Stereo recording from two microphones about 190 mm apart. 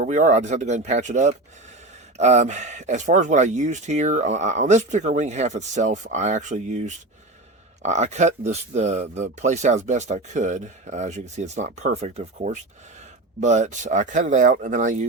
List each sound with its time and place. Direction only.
0.0 s speech: 40° right (ahead or behind)